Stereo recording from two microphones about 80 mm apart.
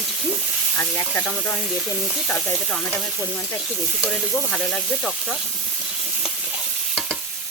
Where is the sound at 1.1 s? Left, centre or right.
Centre.